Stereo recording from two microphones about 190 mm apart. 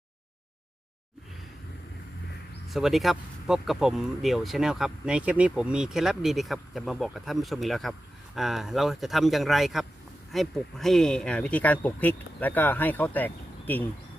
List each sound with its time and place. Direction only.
2.6 s speech: centre (ahead or behind)